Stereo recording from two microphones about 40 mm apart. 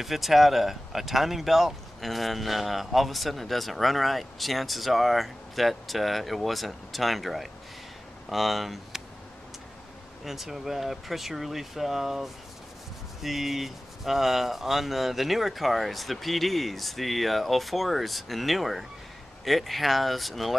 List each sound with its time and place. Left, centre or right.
0.0 s speech: centre
10.2 s speech: centre